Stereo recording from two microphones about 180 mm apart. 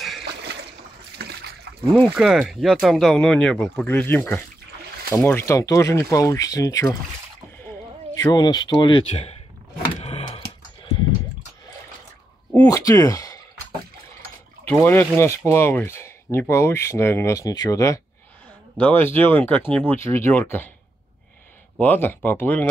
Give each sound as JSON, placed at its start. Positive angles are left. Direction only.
{"t": 1.1, "sound": "a sound", "side_deg": -65}
{"t": 2.1, "sound": "speech", "side_deg": -5}
{"t": 8.1, "sound": "speech", "side_deg": 20}
{"t": 10.0, "sound": "tick-tock", "side_deg": 30}
{"t": 12.6, "sound": "speech", "side_deg": 20}
{"t": 14.7, "sound": "speech", "side_deg": 10}
{"t": 21.7, "sound": "speech", "side_deg": 10}